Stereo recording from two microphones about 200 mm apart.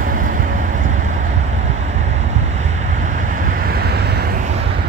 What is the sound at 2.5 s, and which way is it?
Vehicle, 35° right (ahead or behind).